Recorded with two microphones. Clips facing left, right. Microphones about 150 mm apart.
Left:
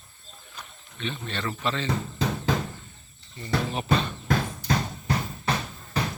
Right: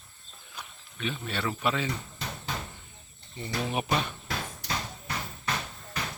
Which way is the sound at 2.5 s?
90° left.